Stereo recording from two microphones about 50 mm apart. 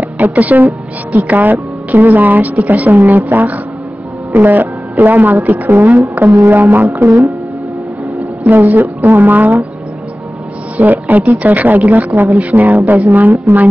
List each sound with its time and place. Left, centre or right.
0.2 s a woman's voice: right
5.9 s music: right
6.5 s a woman's voice: right
8.5 s a woman's voice: right
10.8 s a woman's voice: right